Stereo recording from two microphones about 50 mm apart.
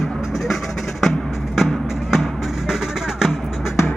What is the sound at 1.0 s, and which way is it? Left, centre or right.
Music, centre.